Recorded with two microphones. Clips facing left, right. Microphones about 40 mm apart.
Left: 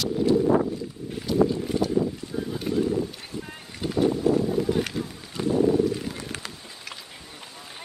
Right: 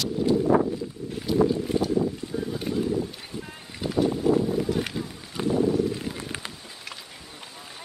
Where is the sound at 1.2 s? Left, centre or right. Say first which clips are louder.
Even; centre.